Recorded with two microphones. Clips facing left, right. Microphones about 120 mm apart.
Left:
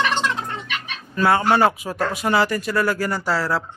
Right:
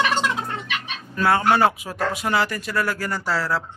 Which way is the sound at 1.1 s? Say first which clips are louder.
Left 1 dB; 5° left (ahead or behind).